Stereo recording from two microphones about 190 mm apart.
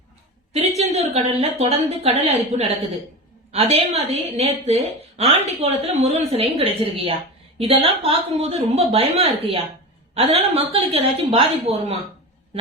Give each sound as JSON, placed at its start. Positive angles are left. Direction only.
{"t": 0.5, "sound": "a woman's voice", "side_deg": -35}